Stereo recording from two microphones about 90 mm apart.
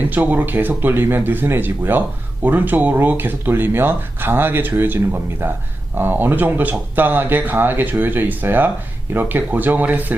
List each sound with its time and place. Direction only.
0.1 s speech: 20° right (ahead or behind)